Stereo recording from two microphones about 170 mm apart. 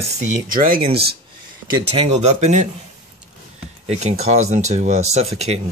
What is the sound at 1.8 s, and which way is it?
Speech, 35° right (ahead or behind).